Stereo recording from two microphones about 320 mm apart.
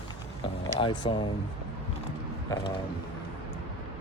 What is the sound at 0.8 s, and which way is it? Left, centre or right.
Speech, centre.